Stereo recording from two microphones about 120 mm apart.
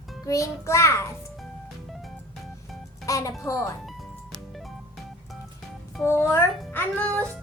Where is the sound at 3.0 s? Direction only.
30° left (ahead or behind).